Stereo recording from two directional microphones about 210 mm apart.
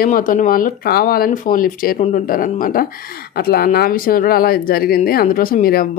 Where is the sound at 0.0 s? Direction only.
40° left (ahead or behind).